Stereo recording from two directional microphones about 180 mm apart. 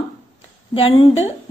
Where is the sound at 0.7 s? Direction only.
30° left (ahead or behind).